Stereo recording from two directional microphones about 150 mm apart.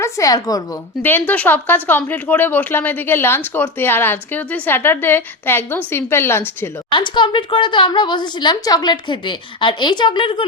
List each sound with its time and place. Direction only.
0.0 s a woman's voice: 25° left (ahead or behind)
1.3 s speech: 10° left (ahead or behind)
6.9 s a woman's voice: 30° left (ahead or behind)